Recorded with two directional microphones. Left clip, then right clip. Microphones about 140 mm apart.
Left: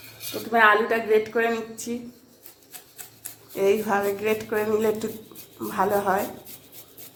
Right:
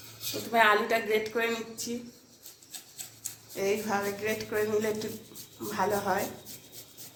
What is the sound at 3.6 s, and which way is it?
Speech, 90° left.